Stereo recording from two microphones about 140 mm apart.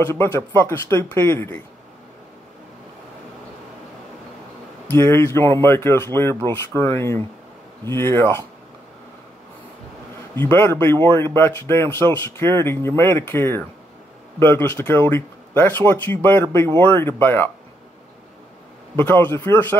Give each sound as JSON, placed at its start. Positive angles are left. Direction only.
{"t": 0.0, "sound": "speech", "side_deg": 20}
{"t": 4.9, "sound": "speech", "side_deg": 20}
{"t": 10.3, "sound": "speech", "side_deg": 15}
{"t": 18.9, "sound": "speech", "side_deg": 15}